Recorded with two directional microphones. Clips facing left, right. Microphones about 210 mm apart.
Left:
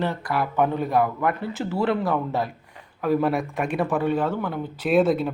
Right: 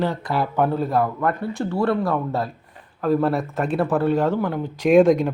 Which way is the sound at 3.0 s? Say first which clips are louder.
Right 2 dB; 15° left (ahead or behind).